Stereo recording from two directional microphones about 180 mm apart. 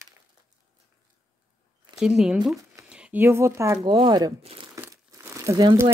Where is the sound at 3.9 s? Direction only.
25° right (ahead or behind).